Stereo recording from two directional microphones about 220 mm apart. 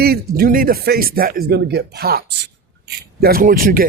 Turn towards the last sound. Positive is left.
turn(degrees=-40)  # may be behind; listen again after turning